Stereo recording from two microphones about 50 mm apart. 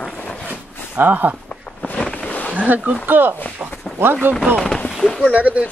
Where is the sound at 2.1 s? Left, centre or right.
Left.